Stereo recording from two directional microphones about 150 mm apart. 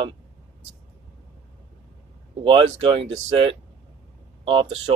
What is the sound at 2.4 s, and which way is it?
Speech, 35° right (ahead or behind).